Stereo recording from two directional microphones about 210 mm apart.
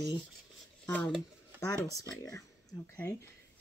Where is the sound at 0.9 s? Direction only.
5° left (ahead or behind).